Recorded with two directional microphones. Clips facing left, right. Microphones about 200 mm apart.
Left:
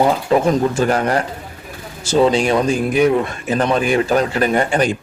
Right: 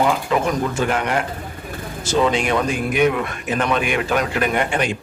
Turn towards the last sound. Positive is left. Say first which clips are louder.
# left 4 dB
turn(degrees=35)  # may be behind; listen again after turning